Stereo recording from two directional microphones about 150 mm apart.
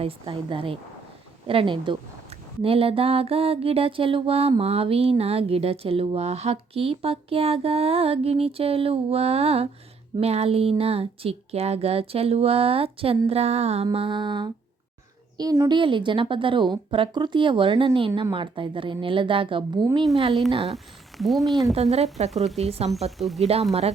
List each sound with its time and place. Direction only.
0.0 s a sound: 35° right (ahead or behind)
20.7 s speech: centre (ahead or behind)
21.8 s speech: 45° right (ahead or behind)
23.1 s speech: centre (ahead or behind)
23.4 s speech: 45° right (ahead or behind)